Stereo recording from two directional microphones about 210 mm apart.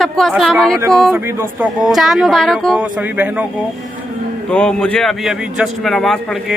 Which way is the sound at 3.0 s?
10° right (ahead or behind).